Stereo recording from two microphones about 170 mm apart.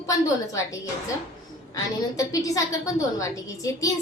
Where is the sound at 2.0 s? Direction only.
20° left (ahead or behind).